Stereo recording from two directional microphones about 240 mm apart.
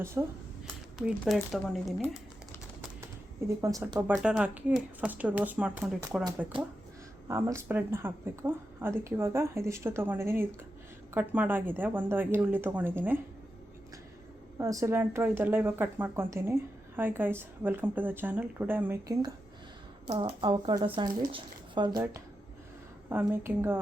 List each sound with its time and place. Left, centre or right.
0.0 s speech: centre
3.4 s speech: centre
14.6 s speech: centre